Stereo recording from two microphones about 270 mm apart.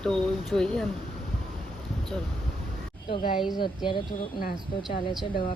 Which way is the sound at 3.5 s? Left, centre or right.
Centre.